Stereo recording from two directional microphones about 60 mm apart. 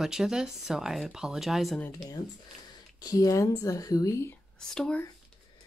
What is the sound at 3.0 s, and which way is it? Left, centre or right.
A woman's voice, left.